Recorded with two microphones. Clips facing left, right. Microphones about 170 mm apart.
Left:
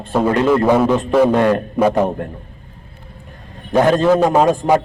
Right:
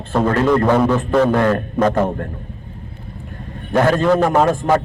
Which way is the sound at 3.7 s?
20° left (ahead or behind).